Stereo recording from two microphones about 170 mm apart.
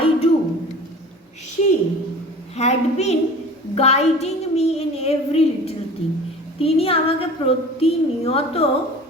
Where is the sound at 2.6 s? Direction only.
40° left (ahead or behind).